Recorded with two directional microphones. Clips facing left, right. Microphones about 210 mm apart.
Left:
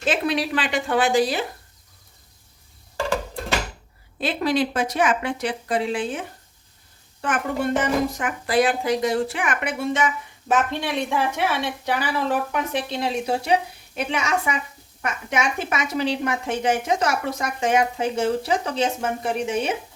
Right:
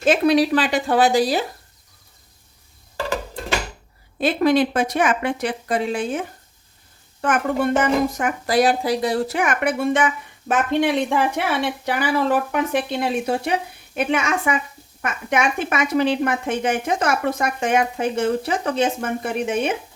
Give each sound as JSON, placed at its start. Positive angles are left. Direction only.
{"t": 0.0, "sound": "a child's voice", "side_deg": -40}
{"t": 4.2, "sound": "a woman's voice", "side_deg": -50}
{"t": 7.2, "sound": "a child's voice", "side_deg": -50}